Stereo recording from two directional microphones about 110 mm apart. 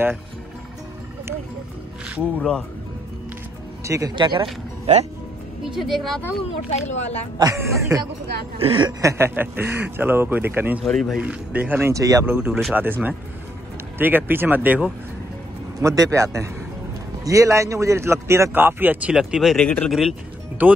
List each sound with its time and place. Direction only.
2.3 s speech: 5° left (ahead or behind)
3.8 s speech: 30° right (ahead or behind)
4.1 s speech: 45° right (ahead or behind)
5.8 s speech: centre (ahead or behind)
6.7 s speech: 90° left
7.3 s speech: 30° right (ahead or behind)
8.5 s speech: 55° right (ahead or behind)
9.0 s speech: 20° right (ahead or behind)
10.9 s speech: 5° left (ahead or behind)
11.1 s speech: 10° right (ahead or behind)
11.9 s speech: 30° right (ahead or behind)
12.3 s speech: 20° right (ahead or behind)
15.8 s speech: 30° right (ahead or behind); by 20.2 s centre (ahead or behind)
20.6 s speech: 15° right (ahead or behind)